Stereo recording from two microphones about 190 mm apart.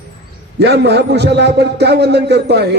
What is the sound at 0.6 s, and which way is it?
A man's voice, 60° right (ahead or behind).